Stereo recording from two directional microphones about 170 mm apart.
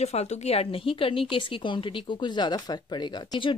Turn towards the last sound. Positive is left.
turn(degrees=25)  # may be behind; listen again after turning